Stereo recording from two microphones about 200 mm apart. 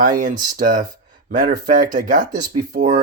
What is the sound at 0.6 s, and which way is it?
Speech, 40° right (ahead or behind).